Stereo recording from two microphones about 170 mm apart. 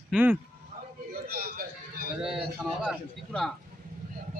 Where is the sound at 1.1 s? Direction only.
60° right (ahead or behind).